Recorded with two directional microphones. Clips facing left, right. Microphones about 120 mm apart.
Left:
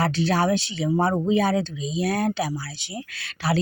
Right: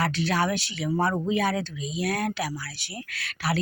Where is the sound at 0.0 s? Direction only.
30° left (ahead or behind).